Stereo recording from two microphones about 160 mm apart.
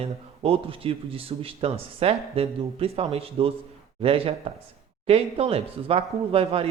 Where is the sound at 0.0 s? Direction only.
35° right (ahead or behind).